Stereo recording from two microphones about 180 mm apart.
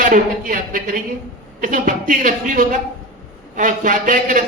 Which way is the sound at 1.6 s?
50° right (ahead or behind).